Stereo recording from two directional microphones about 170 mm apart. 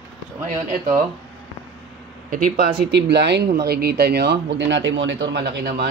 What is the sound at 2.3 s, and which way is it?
Speech, 70° right (ahead or behind).